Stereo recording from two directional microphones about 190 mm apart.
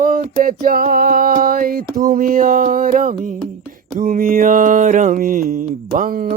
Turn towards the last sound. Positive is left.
turn(degrees=-45)  # may be behind; listen again after turning